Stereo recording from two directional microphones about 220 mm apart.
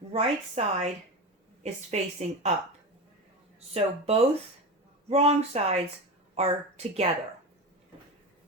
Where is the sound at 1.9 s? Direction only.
30° right (ahead or behind).